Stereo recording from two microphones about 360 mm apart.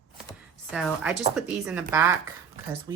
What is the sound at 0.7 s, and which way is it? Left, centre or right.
Speech, centre.